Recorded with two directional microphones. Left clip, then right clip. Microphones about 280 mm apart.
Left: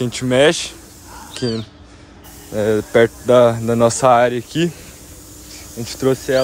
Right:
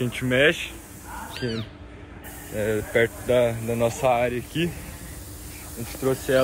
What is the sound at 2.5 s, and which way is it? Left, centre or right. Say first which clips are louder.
Speech: left 8 dB; left.